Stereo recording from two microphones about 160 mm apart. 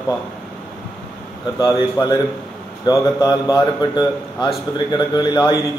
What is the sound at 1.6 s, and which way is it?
A man's voice, 20° left (ahead or behind).